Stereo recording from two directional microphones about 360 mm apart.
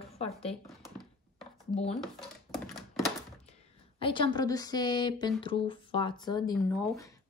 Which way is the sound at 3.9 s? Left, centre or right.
Centre.